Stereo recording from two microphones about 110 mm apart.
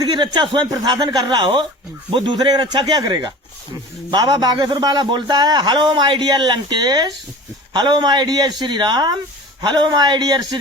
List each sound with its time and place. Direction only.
0.0 s a man's voice: 45° right (ahead or behind)